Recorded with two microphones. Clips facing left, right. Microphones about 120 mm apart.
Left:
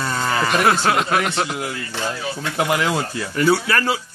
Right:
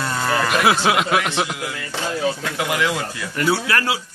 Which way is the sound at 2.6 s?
30° left (ahead or behind).